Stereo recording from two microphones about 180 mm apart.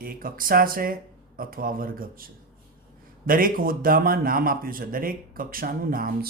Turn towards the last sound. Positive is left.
turn(degrees=-55)  # may be behind; listen again after turning